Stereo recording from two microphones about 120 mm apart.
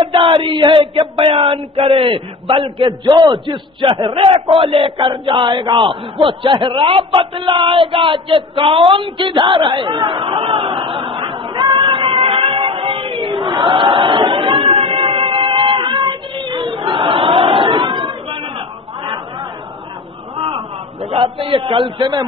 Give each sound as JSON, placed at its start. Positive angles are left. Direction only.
{"t": 0.1, "sound": "a man's voice", "side_deg": -45}
{"t": 11.8, "sound": "a sound", "side_deg": -45}
{"t": 21.2, "sound": "a man's voice", "side_deg": -50}
{"t": 21.9, "sound": "a man's voice", "side_deg": -35}